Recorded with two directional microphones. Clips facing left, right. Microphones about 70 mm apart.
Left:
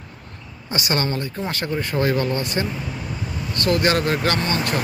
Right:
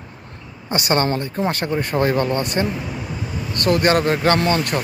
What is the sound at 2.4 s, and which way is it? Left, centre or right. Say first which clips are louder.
Speech: right 3 dB; right.